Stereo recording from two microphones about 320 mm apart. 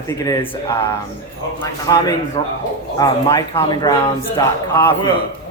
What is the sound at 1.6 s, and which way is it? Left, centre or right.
Speech, centre.